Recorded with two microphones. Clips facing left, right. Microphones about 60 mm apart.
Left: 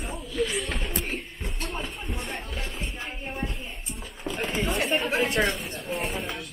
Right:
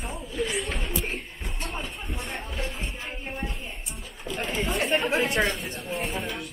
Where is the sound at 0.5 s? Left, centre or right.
Centre.